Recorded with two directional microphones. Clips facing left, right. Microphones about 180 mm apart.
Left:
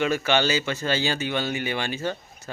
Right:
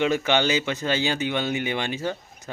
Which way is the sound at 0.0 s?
20° right (ahead or behind).